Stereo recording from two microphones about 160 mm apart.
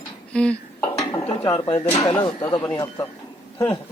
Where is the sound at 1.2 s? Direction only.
35° left (ahead or behind).